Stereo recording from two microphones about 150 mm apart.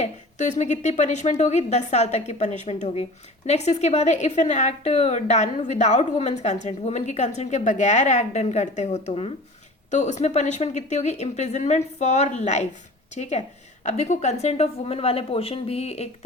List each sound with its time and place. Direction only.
0.0 s a woman's voice: 55° left (ahead or behind)